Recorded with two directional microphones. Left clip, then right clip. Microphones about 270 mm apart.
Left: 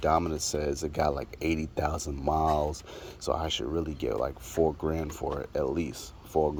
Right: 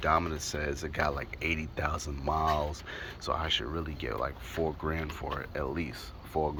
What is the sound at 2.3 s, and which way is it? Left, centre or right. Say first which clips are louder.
Speech: left 3 dB; centre.